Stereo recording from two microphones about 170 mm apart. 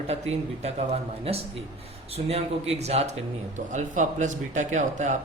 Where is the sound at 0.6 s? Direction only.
40° right (ahead or behind).